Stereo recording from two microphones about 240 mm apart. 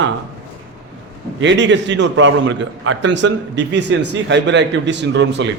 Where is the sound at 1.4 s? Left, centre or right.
Right.